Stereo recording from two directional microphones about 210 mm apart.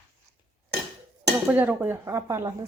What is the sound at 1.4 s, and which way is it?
Speech, 5° right (ahead or behind).